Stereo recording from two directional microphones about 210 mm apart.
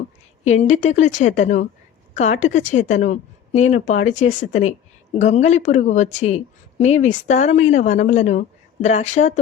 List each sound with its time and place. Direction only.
0.4 s a woman's voice: 35° left (ahead or behind)